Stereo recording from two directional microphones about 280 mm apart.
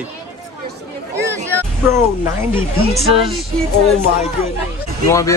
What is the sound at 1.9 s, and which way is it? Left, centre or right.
Speech, centre.